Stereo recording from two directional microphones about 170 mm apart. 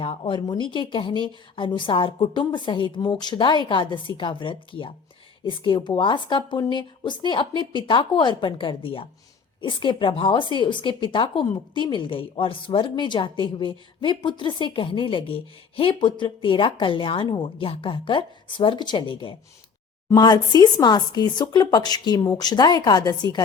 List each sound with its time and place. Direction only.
0.0 s a woman's voice: 30° left (ahead or behind)